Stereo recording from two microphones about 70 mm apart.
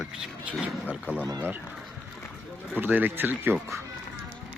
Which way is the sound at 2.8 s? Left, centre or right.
Right.